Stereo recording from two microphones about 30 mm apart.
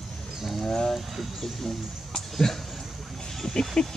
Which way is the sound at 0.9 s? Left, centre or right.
Centre.